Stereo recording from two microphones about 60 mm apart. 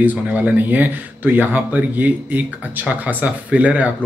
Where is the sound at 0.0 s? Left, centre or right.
Right.